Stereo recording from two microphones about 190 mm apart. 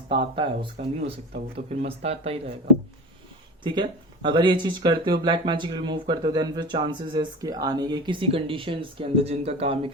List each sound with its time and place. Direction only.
0.3 s speech: 25° right (ahead or behind)
3.6 s speech: 25° right (ahead or behind)